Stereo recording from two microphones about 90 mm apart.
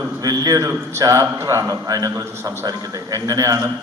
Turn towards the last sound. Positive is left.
turn(degrees=-40)  # may be behind; listen again after turning